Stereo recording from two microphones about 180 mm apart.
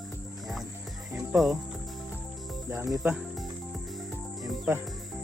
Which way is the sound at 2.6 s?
15° right (ahead or behind).